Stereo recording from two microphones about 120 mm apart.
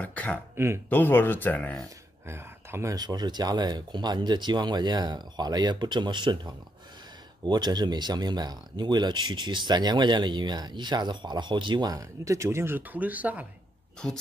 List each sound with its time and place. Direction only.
0.0 s a sound: 10° left (ahead or behind)
0.8 s speech: 15° left (ahead or behind)
2.2 s speech: 20° right (ahead or behind)
14.0 s speech: 5° left (ahead or behind)